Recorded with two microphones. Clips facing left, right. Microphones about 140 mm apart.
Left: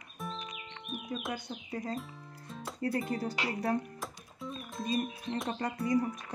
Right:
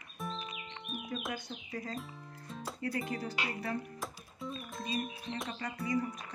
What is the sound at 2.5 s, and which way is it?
Music, centre (ahead or behind).